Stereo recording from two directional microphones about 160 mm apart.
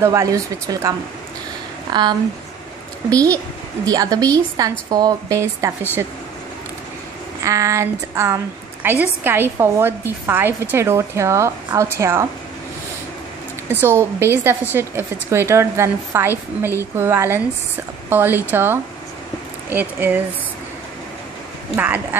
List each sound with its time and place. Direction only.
0.0 s a woman's voice: 20° right (ahead or behind)
7.4 s a woman's voice: 20° right (ahead or behind)
13.7 s a woman's voice: 15° right (ahead or behind)
21.7 s a woman's voice: 10° right (ahead or behind)